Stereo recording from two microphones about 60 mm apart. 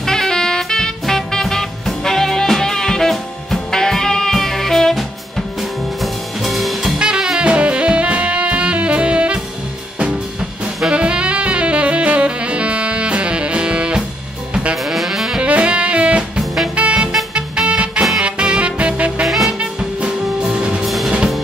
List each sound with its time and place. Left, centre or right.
0.0 s music: centre
7.0 s saxophone: centre
10.9 s saxophone: centre
14.8 s saxophone: centre
15.4 s music: right
16.3 s music: centre
16.7 s music: right
19.2 s music: centre
19.6 s music: centre
20.8 s music: centre